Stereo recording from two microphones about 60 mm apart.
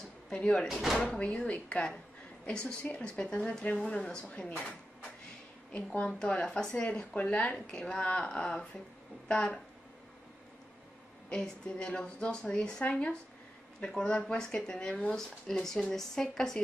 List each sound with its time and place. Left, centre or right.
0.3 s speech: centre
5.7 s speech: centre
11.2 s speech: centre